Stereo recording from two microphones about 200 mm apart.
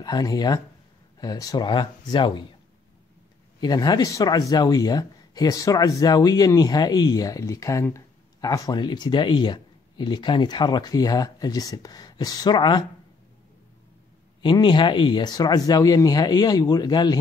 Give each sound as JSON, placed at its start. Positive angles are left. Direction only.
{"t": 0.0, "sound": "speech", "side_deg": 20}
{"t": 3.6, "sound": "speech", "side_deg": 20}
{"t": 14.4, "sound": "speech", "side_deg": 25}